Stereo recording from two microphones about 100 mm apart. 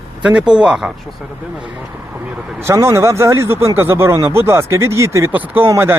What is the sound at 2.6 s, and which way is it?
Speech, 25° right (ahead or behind).